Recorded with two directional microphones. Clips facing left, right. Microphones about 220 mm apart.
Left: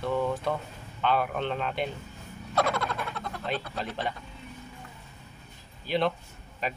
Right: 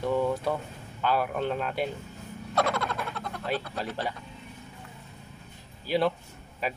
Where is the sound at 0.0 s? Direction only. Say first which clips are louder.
Right 2 dB; 10° right (ahead or behind).